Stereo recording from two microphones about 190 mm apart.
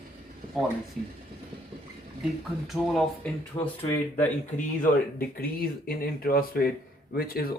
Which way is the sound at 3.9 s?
10° left (ahead or behind).